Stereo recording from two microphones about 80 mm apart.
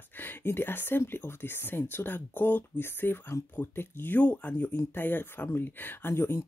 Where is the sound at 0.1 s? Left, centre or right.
Left.